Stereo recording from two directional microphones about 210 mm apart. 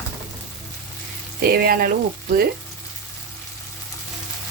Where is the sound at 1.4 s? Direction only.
45° right (ahead or behind).